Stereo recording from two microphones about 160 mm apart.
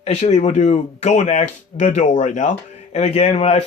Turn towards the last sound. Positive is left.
turn(degrees=40)  # may be behind; listen again after turning